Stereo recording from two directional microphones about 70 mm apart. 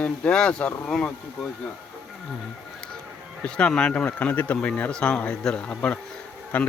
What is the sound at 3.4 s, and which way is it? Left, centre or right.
Speech, centre.